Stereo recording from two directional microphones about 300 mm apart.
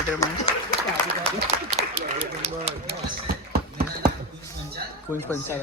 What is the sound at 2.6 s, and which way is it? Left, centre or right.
Clip-clop, right.